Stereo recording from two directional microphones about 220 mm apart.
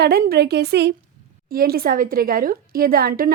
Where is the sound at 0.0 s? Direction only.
45° right (ahead or behind).